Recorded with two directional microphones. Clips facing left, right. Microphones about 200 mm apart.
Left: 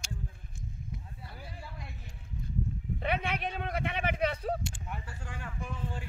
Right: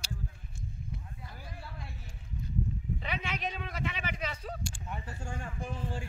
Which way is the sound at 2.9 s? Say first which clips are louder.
Left 9 dB; 55° left (ahead or behind).